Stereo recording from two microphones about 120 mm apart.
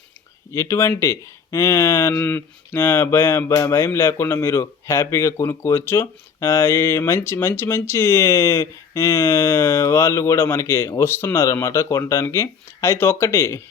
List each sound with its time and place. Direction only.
0.5 s speech: 25° left (ahead or behind)